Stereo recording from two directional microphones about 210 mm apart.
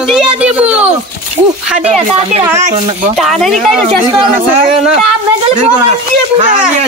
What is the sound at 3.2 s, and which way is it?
Speech, centre (ahead or behind).